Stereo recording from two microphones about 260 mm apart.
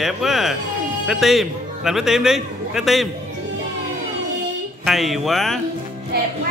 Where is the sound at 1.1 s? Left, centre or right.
Centre.